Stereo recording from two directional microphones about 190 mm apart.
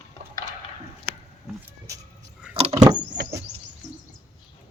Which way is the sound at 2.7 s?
20° right (ahead or behind).